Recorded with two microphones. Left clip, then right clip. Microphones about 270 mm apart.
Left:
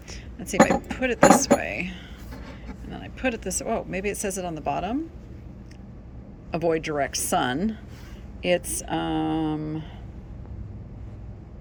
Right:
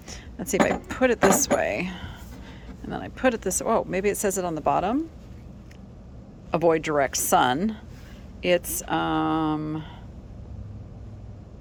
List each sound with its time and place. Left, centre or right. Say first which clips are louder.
0.9 s speech: left 2 dB; centre
6.5 s speech: right 3 dB; centre